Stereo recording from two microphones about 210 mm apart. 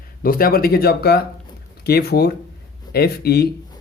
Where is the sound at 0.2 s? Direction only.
45° left (ahead or behind).